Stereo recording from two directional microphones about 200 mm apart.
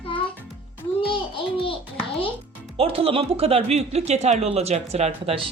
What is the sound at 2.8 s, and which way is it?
Speech, 30° right (ahead or behind).